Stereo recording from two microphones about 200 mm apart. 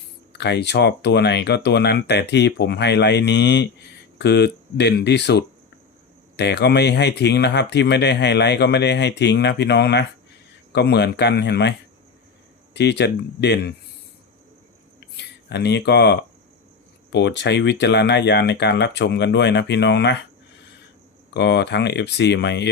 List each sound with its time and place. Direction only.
0.3 s speech: 60° left (ahead or behind)
12.7 s speech: 60° left (ahead or behind)
15.0 s a sound: 55° left (ahead or behind)
17.1 s speech: 60° left (ahead or behind)
21.3 s speech: 60° left (ahead or behind)